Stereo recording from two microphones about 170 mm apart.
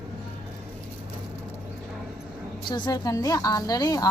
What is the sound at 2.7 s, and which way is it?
A woman's voice, 25° left (ahead or behind).